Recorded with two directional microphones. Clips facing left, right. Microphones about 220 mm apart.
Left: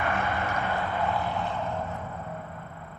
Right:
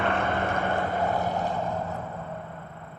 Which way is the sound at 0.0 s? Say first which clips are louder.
Right 3 dB; 55° right (ahead or behind).